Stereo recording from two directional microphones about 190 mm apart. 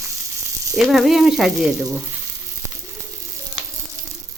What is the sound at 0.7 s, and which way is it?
Speech, centre (ahead or behind).